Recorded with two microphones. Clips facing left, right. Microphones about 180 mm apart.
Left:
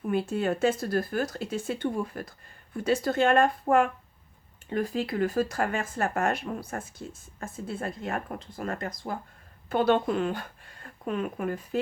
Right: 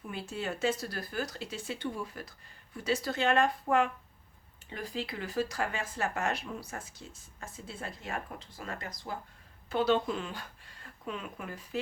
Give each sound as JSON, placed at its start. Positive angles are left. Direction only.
{"t": 0.1, "sound": "speech", "side_deg": 55}